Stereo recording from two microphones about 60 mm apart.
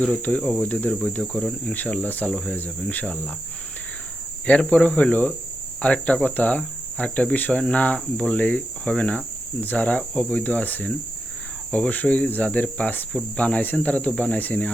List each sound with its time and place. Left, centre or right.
0.3 s cricket: left
1.2 s speech: centre
1.6 s cricket: left
2.3 s speech: centre
2.9 s cricket: left
4.4 s speech: centre
5.8 s cricket: left
6.6 s speech: left
7.6 s cricket: left